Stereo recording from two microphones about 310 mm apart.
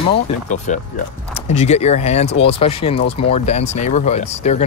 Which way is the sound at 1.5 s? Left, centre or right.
Left.